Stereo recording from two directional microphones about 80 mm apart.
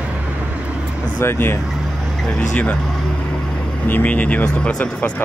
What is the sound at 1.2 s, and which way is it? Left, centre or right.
Speech, left.